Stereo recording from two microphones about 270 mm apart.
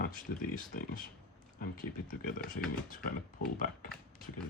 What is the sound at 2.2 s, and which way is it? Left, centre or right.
Speech, left.